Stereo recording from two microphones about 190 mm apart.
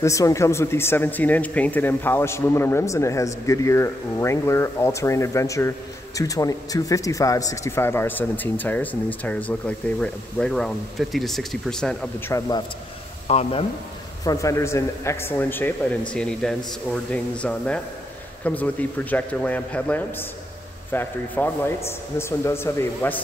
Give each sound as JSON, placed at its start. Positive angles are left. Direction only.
{"t": 0.0, "sound": "speech", "side_deg": 15}
{"t": 12.3, "sound": "a man's voice", "side_deg": 20}
{"t": 13.3, "sound": "a man's voice", "side_deg": 30}
{"t": 14.2, "sound": "speech", "side_deg": 15}